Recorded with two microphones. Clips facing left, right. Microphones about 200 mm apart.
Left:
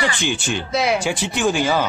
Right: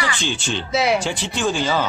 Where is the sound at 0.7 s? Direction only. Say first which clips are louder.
Right 1 dB; centre (ahead or behind).